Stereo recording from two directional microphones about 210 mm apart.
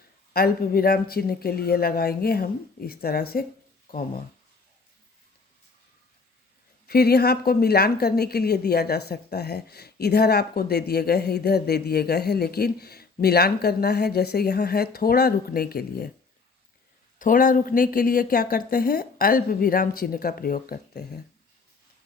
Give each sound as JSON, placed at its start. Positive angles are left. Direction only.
{"t": 0.3, "sound": "a woman's voice", "side_deg": 45}
{"t": 6.8, "sound": "a woman's voice", "side_deg": 50}
{"t": 17.2, "sound": "a woman's voice", "side_deg": 40}